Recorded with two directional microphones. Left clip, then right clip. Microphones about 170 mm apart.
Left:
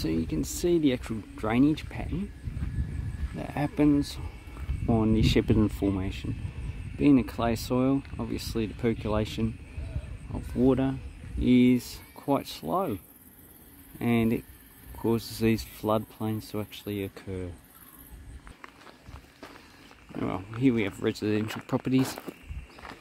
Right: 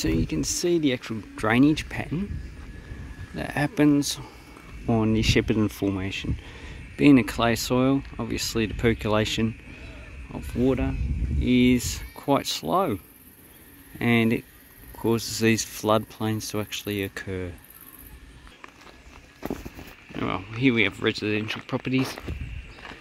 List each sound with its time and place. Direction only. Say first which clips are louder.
0.0 s speech: right 4 dB; centre (ahead or behind)
3.3 s speech: right 4 dB; centre (ahead or behind)
10.6 s speech: even; 25° left (ahead or behind)
11.6 s speech: right 3 dB; centre (ahead or behind)
13.9 s speech: right 5 dB; centre (ahead or behind)
20.2 s speech: right 3 dB; 5° left (ahead or behind)
21.7 s speech: left 1 dB; 25° left (ahead or behind)